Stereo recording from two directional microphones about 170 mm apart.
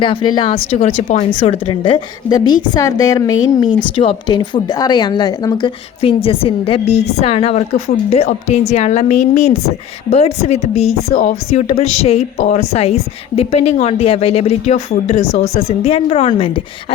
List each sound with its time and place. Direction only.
0.0 s speech: 30° left (ahead or behind)
1.8 s a woman's voice: 25° left (ahead or behind)